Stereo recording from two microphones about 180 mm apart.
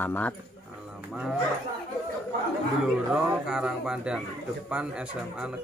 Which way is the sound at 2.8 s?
5° right (ahead or behind).